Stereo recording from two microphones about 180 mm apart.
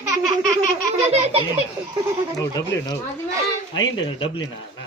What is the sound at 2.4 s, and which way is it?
Speech, 20° left (ahead or behind).